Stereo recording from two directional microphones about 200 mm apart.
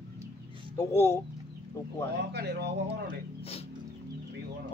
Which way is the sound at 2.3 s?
55° right (ahead or behind).